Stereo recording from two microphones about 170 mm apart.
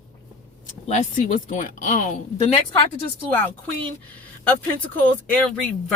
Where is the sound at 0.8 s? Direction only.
45° left (ahead or behind).